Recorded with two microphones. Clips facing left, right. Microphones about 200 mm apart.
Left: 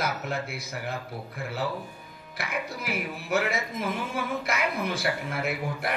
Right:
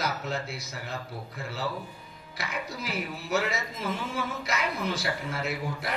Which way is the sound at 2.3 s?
55° left (ahead or behind).